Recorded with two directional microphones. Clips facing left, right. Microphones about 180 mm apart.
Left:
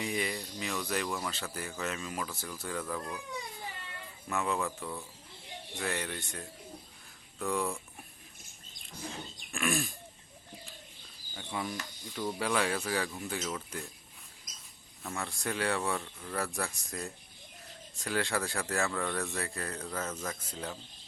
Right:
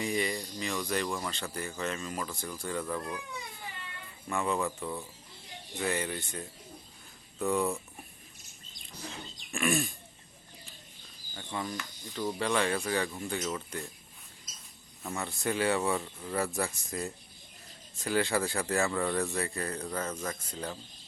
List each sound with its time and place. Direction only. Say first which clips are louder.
0.0 s speech: right 3 dB; centre (ahead or behind)
4.3 s speech: right 2 dB; centre (ahead or behind)
9.5 s speech: right 3 dB; centre (ahead or behind)
11.3 s speech: right 1 dB; 5° left (ahead or behind)
12.0 s speech: right 2 dB; 5° right (ahead or behind)
14.5 s mouse: right 1 dB; 15° left (ahead or behind)
15.0 s speech: right 3 dB; centre (ahead or behind)